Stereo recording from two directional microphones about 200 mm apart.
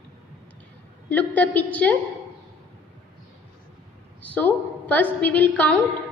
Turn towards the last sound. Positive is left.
turn(degrees=5)  # may be behind; listen again after turning